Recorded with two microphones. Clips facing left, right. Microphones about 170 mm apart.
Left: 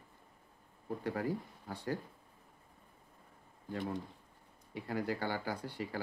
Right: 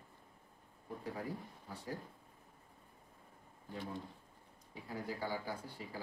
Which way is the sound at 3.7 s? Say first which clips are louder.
Left 6 dB; 70° left (ahead or behind).